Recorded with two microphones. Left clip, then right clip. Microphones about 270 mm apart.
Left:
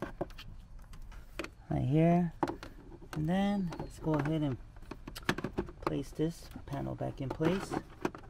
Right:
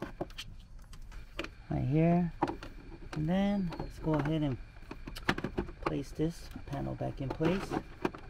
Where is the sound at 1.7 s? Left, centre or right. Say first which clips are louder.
Left 1 dB; left.